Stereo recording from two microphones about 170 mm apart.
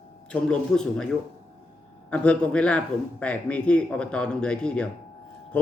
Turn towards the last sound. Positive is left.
turn(degrees=5)  # may be behind; listen again after turning